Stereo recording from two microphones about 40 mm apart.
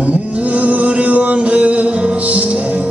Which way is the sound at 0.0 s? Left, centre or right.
Right.